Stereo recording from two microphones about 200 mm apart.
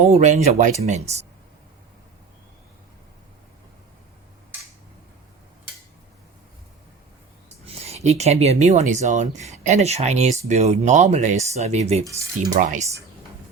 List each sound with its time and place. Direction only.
0.0 s speech: 35° right (ahead or behind)
7.8 s speech: 30° right (ahead or behind)